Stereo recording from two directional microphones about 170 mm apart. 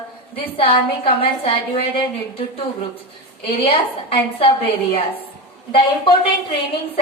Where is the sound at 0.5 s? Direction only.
35° left (ahead or behind).